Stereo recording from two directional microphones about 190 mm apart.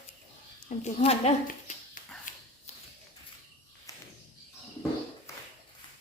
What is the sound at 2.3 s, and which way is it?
Dog, 45° left (ahead or behind).